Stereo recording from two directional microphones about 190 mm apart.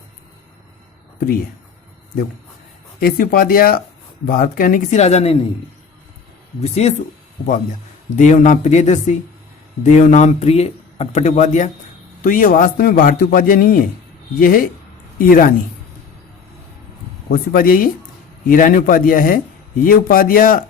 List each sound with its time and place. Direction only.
3.0 s a man's voice: 50° left (ahead or behind); by 5.4 s 35° left (ahead or behind)
6.6 s speech: 35° left (ahead or behind)
8.1 s a man's voice: 40° left (ahead or behind)
17.2 s a man's voice: 50° left (ahead or behind)